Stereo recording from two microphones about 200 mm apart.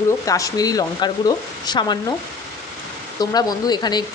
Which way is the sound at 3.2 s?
20° left (ahead or behind).